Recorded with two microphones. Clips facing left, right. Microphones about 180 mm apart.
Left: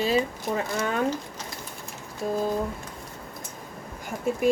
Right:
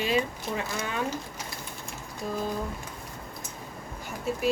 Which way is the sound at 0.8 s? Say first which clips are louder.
Left 5 dB; 50° left (ahead or behind).